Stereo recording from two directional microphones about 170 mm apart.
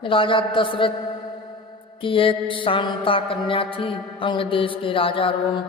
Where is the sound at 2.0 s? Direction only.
30° left (ahead or behind).